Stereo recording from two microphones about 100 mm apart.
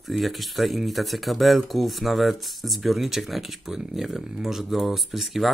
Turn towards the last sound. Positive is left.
turn(degrees=0)  # may be behind; listen again after turning